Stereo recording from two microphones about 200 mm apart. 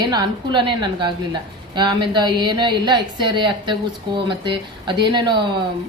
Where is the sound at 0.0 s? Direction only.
20° right (ahead or behind).